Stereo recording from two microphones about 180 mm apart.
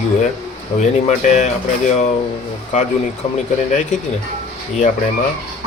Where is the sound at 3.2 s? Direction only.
30° left (ahead or behind).